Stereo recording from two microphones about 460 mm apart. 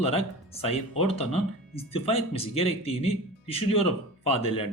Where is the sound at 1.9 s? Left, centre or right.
Centre.